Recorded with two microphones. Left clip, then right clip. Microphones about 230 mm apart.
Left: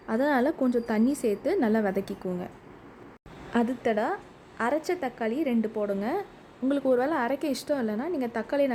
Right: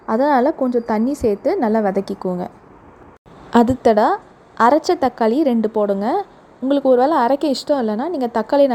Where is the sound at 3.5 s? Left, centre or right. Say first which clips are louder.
Right 13 dB; right.